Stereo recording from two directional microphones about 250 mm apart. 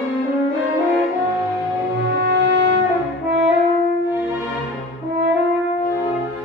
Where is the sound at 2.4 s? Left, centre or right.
Right.